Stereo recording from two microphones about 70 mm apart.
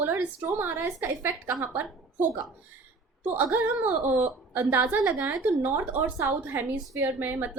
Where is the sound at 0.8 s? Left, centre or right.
Right.